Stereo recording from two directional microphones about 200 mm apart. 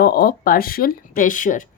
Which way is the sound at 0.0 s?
50° left (ahead or behind).